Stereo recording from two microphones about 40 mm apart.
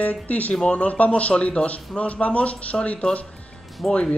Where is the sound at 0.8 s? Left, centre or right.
Left.